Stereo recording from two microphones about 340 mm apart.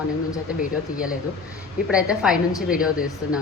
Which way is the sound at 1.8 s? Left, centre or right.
Centre.